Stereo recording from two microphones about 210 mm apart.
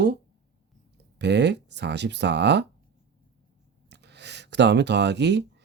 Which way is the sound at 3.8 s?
55° right (ahead or behind).